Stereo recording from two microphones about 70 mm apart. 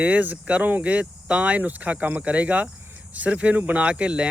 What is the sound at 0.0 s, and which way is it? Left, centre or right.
Speech, right.